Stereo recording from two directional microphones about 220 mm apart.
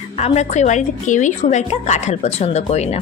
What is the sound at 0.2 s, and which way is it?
A woman's voice, 30° left (ahead or behind).